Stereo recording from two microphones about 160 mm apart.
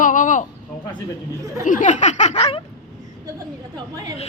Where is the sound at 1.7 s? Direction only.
55° left (ahead or behind); by 2.6 s 35° left (ahead or behind).